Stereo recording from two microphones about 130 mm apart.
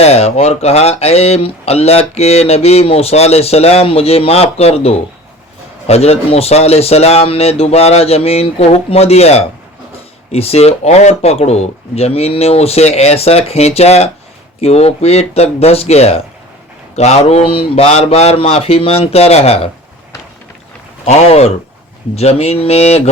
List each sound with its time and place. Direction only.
0.0 s speech: 55° left (ahead or behind)
21.0 s speech: 55° left (ahead or behind)